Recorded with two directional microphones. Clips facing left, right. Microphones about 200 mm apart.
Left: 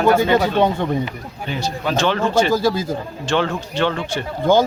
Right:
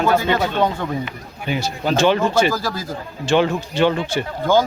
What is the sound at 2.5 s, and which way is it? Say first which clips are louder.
Speech: left 7 dB; 25° left (ahead or behind).